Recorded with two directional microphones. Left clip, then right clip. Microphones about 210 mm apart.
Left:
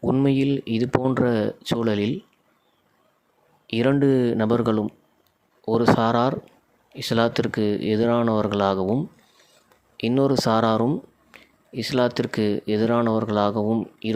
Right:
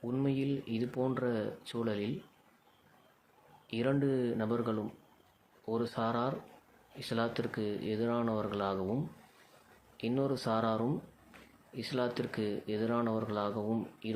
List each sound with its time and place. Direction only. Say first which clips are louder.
0.0 s speech: left 13 dB; 50° left (ahead or behind)
3.7 s speech: left 12 dB; 50° left (ahead or behind)
10.0 s speech: left 13 dB; 50° left (ahead or behind)
11.3 s a sound: left 9 dB; 45° left (ahead or behind)
11.7 s speech: left 13 dB; 50° left (ahead or behind)